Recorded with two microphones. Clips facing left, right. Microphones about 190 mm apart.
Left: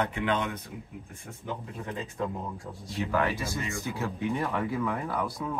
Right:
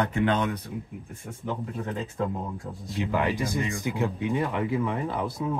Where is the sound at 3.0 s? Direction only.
15° right (ahead or behind).